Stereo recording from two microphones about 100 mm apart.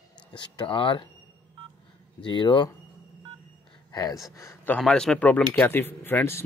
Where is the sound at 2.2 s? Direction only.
50° left (ahead or behind).